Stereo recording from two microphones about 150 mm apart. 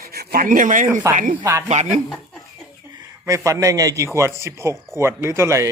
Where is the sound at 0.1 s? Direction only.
90° right; by 1.4 s 60° right (ahead or behind).